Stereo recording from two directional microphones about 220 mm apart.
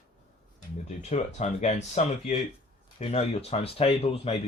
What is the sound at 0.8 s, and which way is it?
Speech, 30° left (ahead or behind).